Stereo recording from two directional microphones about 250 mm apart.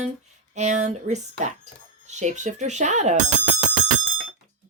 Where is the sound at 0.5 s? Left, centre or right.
Right.